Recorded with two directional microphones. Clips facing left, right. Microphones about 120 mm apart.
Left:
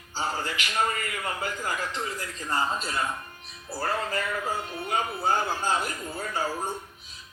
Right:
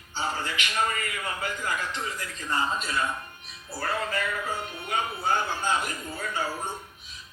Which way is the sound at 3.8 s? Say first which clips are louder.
Even; 35° left (ahead or behind).